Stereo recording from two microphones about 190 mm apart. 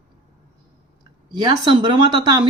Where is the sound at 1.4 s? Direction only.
25° right (ahead or behind).